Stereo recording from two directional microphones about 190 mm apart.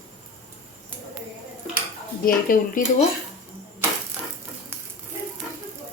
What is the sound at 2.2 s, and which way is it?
Speech, 45° left (ahead or behind).